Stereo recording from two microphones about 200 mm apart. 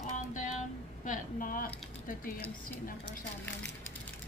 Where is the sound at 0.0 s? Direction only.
40° left (ahead or behind).